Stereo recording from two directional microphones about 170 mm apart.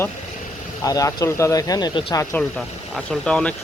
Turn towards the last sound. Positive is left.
turn(degrees=5)  # may be behind; listen again after turning